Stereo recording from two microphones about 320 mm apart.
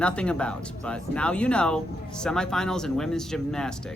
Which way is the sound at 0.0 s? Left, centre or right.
Centre.